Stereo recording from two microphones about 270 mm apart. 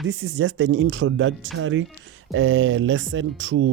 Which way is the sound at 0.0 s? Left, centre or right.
Right.